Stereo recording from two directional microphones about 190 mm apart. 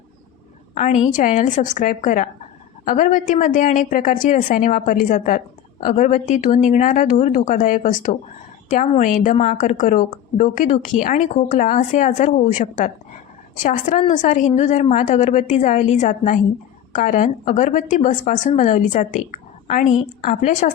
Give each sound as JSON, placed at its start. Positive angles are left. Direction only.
{"t": 0.7, "sound": "a woman's voice", "side_deg": 40}